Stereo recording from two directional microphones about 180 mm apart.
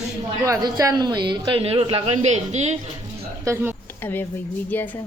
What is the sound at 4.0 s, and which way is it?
Speech, 10° left (ahead or behind).